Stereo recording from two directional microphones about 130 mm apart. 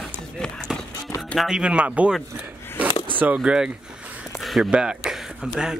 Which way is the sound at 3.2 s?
10° right (ahead or behind).